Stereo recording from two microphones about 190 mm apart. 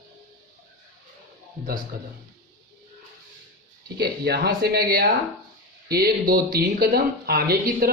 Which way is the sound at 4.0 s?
55° right (ahead or behind).